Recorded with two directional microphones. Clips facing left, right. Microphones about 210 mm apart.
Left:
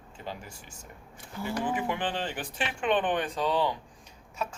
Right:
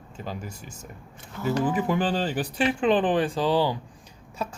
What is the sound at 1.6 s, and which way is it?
Speech, 40° right (ahead or behind).